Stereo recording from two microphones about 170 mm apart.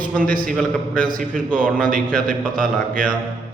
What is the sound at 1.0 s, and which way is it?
Speech, 55° right (ahead or behind).